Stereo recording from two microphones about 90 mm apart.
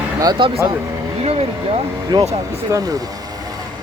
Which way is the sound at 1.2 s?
90° right.